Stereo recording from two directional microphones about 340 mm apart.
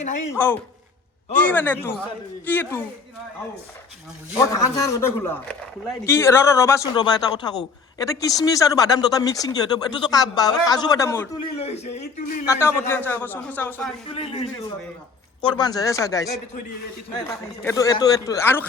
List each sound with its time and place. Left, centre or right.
0.3 s a man's voice: centre
4.4 s speech: centre
12.5 s a man's voice: centre
14.1 s speech: centre
17.6 s speech: centre